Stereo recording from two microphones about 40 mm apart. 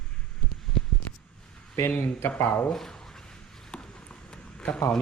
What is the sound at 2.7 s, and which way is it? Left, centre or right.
Speech, centre.